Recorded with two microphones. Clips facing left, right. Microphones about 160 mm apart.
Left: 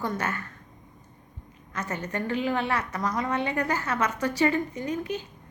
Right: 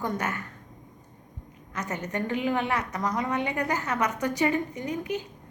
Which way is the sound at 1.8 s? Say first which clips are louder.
Even; 20° right (ahead or behind).